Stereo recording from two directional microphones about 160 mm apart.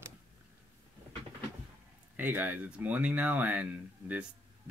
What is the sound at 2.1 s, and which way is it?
Speech, 10° right (ahead or behind).